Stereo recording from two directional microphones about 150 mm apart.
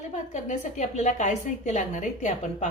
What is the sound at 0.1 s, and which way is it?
A woman's voice, 50° left (ahead or behind).